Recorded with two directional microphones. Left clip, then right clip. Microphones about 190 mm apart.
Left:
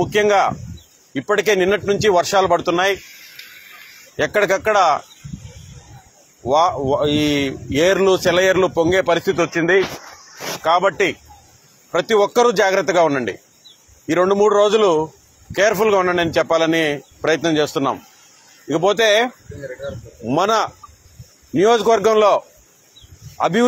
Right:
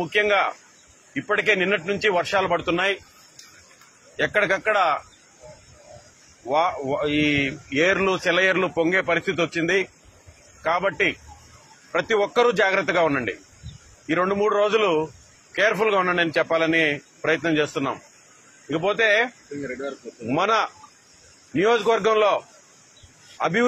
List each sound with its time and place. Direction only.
0.1 s speech: 50° left (ahead or behind)
4.2 s speech: 50° left (ahead or behind)
6.5 s speech: 45° left (ahead or behind)
10.6 s speech: 45° left (ahead or behind)
20.3 s speech: 50° left (ahead or behind)